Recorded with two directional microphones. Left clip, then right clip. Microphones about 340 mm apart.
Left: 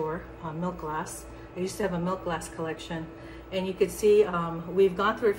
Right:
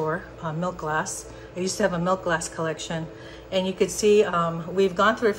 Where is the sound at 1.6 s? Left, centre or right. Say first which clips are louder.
Right 6 dB; right.